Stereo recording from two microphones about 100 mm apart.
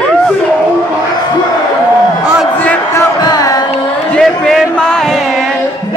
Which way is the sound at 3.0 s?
35° left (ahead or behind).